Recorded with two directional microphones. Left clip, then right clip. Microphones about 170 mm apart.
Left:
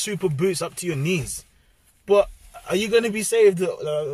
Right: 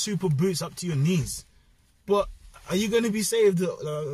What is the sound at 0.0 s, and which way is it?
Speech, 15° left (ahead or behind).